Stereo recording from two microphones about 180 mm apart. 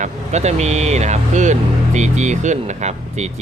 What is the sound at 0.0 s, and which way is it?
Speech, 40° right (ahead or behind).